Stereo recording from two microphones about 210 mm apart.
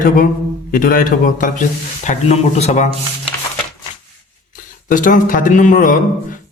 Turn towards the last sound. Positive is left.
turn(degrees=40)  # may be behind; listen again after turning